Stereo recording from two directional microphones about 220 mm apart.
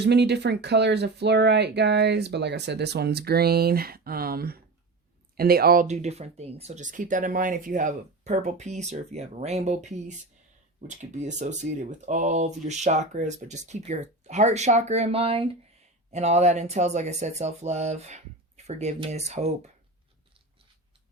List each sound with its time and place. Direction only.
0.0 s speech: 50° right (ahead or behind); by 19.7 s 30° right (ahead or behind)